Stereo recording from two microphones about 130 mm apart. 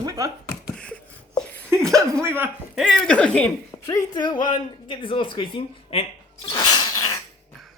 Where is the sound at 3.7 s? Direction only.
25° left (ahead or behind); by 6.0 s 45° left (ahead or behind).